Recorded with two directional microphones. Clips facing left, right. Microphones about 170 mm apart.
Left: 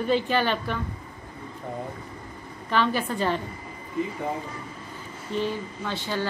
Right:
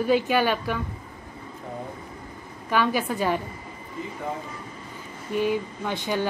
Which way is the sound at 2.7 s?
10° right (ahead or behind).